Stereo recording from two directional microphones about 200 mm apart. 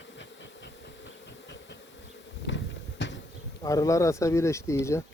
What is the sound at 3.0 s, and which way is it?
Bee, 60° left (ahead or behind).